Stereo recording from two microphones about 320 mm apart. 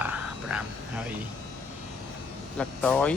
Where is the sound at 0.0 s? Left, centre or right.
Centre.